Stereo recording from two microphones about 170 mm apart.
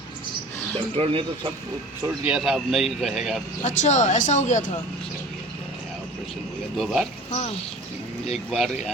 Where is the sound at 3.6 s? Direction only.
45° left (ahead or behind).